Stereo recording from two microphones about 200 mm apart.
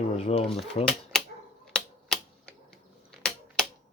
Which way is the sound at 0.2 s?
30° left (ahead or behind).